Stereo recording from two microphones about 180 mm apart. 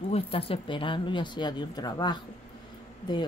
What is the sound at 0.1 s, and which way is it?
A woman's voice, 30° left (ahead or behind).